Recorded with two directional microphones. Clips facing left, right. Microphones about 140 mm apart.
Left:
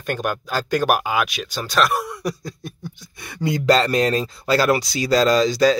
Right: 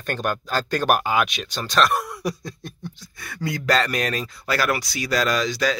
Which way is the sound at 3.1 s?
20° left (ahead or behind).